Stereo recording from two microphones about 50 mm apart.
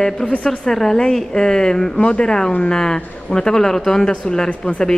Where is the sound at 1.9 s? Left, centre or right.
Left.